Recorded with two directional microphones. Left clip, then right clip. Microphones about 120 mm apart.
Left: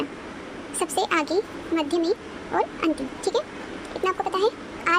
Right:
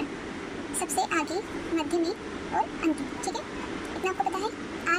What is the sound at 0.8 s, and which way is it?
A woman's voice, 50° left (ahead or behind).